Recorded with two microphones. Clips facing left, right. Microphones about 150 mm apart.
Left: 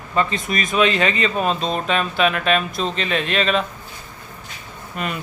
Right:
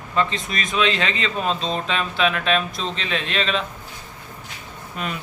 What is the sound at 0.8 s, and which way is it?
Speech, 5° left (ahead or behind).